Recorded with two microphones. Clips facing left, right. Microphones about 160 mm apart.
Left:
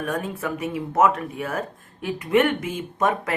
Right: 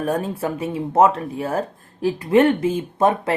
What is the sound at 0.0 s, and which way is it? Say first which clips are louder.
Speech: right 5 dB; 30° right (ahead or behind).